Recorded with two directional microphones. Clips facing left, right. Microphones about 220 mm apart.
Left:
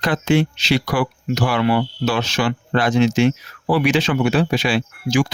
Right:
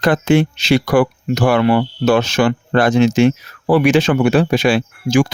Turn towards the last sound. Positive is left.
turn(degrees=-50)  # may be behind; listen again after turning